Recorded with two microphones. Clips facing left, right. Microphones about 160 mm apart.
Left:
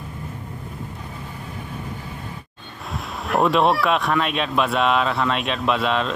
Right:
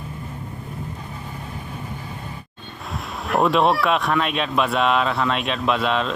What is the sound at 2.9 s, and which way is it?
Speech, centre (ahead or behind).